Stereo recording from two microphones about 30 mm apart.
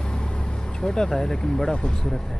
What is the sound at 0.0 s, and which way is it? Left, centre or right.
Speech, left.